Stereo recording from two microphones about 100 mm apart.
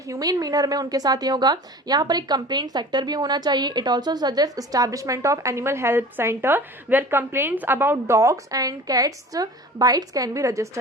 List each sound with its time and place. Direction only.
0.1 s a woman's voice: 40° right (ahead or behind)